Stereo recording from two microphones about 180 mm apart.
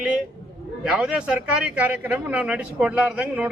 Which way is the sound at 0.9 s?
5° right (ahead or behind).